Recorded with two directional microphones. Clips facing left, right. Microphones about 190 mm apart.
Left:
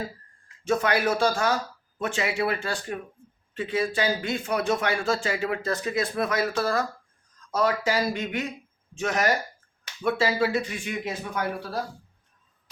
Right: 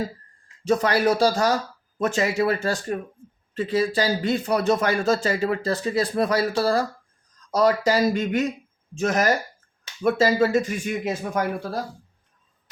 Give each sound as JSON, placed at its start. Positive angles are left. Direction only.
{"t": 0.6, "sound": "speech", "side_deg": -35}